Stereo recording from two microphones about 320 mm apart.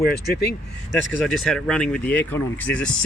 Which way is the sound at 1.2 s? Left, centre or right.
Centre.